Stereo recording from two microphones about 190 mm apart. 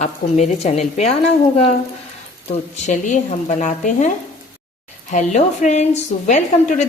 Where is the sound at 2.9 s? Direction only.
40° left (ahead or behind).